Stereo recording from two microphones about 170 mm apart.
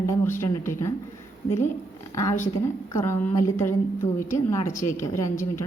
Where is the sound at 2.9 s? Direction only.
15° left (ahead or behind).